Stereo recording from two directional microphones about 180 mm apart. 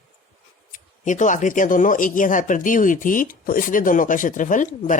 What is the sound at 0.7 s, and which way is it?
Speech, 45° left (ahead or behind).